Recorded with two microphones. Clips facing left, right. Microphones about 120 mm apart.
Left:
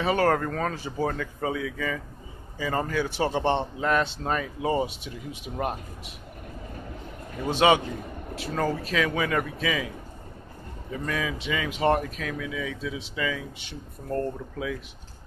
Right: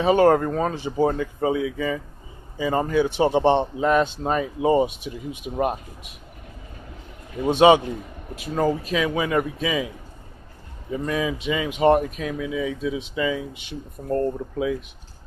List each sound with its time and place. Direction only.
0.0 s speech: 20° right (ahead or behind)
7.4 s speech: 25° right (ahead or behind)
10.9 s speech: 20° right (ahead or behind)